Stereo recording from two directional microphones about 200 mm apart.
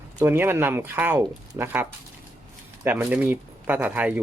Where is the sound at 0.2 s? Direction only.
10° right (ahead or behind).